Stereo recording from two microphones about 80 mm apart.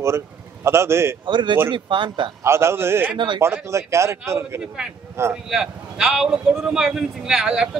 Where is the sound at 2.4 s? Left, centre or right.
Right.